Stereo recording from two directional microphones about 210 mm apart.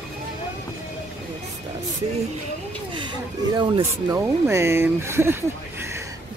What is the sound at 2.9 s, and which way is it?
Speech, 20° right (ahead or behind).